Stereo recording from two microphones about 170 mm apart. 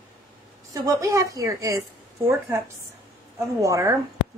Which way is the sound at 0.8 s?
20° right (ahead or behind).